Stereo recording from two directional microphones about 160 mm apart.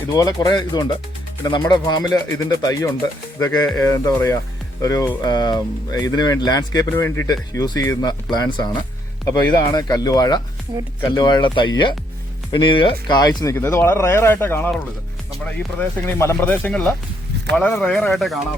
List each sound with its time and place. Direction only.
0.1 s speech: 25° left (ahead or behind)
10.7 s speech: 30° right (ahead or behind)
11.0 s speech: 25° left (ahead or behind); by 18.3 s centre (ahead or behind)